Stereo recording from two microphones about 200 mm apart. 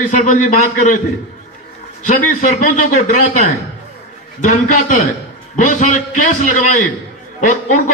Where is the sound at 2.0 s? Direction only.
40° left (ahead or behind).